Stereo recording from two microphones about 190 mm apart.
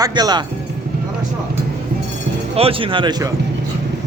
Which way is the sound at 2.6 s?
30° right (ahead or behind).